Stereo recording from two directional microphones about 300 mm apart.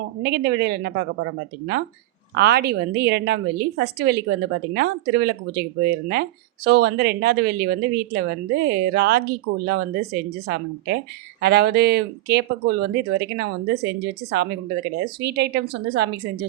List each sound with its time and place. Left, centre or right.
0.2 s a woman's voice: right
2.3 s a woman's voice: right
6.7 s a woman's voice: right